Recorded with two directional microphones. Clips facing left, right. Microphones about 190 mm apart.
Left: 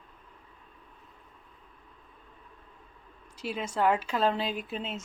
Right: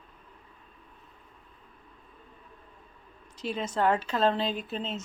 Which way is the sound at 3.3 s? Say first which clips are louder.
Right 1 dB; 10° left (ahead or behind).